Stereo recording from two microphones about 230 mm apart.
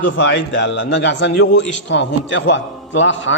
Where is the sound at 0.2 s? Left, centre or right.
Left.